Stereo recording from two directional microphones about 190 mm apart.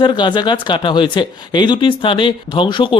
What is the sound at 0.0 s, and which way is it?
Speech, 25° left (ahead or behind).